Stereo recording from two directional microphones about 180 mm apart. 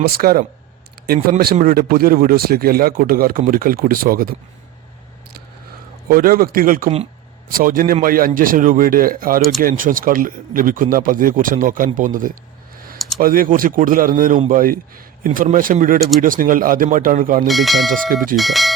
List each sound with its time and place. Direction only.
0.2 s speech: 55° right (ahead or behind)
6.1 s speech: 55° right (ahead or behind)
17.5 s speech: centre (ahead or behind)
17.9 s speech: 50° right (ahead or behind)
18.3 s speech: centre (ahead or behind)